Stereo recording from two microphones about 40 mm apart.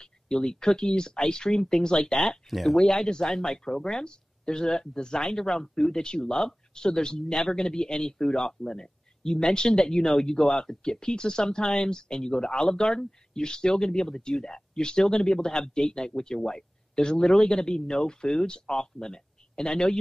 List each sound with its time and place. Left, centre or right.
0.0 s speech: centre